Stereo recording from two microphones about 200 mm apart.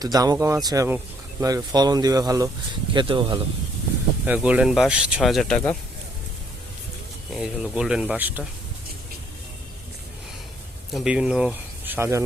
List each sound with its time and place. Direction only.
0.0 s speech: 20° right (ahead or behind)
4.3 s speech: 5° right (ahead or behind)
7.3 s speech: 5° right (ahead or behind)
10.9 s speech: 5° right (ahead or behind)